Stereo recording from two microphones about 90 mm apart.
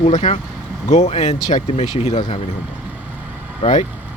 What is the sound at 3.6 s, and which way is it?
Speech, 90° left.